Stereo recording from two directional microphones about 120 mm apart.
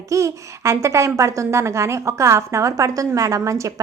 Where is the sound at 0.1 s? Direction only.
25° right (ahead or behind).